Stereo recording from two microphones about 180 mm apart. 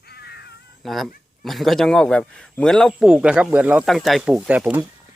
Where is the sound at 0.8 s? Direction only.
Centre (ahead or behind).